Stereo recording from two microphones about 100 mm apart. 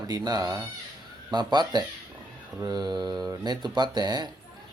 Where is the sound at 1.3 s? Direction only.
45° right (ahead or behind).